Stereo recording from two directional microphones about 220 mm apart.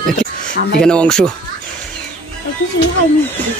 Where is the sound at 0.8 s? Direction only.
5° left (ahead or behind).